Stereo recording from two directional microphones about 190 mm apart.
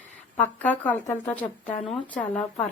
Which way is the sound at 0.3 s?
10° left (ahead or behind).